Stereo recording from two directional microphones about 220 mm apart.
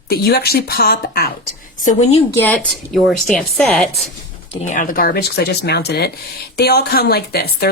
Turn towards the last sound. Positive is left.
turn(degrees=45)  # may be behind; listen again after turning